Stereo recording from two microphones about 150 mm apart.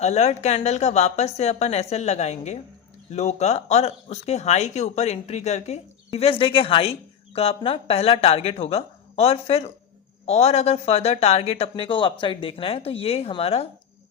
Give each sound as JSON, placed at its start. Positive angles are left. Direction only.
{"t": 0.0, "sound": "speech", "side_deg": 50}